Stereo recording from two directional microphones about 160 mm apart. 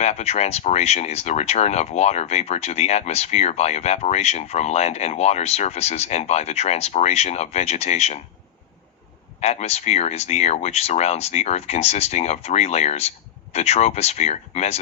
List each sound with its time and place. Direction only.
0.0 s speech: 45° left (ahead or behind)
9.4 s speech: 40° left (ahead or behind)